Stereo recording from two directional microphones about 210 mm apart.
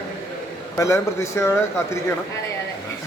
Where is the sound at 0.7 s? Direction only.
15° left (ahead or behind).